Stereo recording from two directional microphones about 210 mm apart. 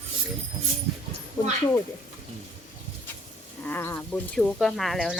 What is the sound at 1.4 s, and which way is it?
Speech, 20° left (ahead or behind).